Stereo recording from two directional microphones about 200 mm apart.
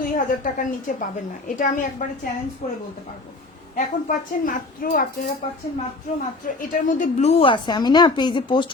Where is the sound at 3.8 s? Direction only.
40° left (ahead or behind).